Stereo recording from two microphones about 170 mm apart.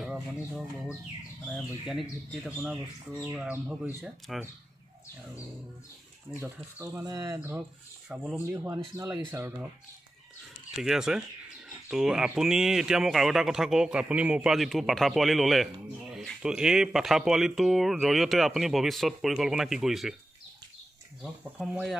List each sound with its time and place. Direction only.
0.0 s a sound: 5° right (ahead or behind)
1.5 s speech: centre (ahead or behind)
6.4 s speech: 15° right (ahead or behind)
7.3 s speech: 10° right (ahead or behind)
10.8 s speech: 5° right (ahead or behind)
21.2 s speech: 5° right (ahead or behind)